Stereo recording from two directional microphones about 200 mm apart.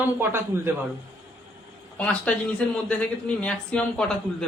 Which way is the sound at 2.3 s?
10° left (ahead or behind).